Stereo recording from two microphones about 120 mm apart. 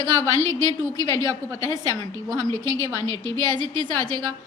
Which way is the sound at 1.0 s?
20° left (ahead or behind).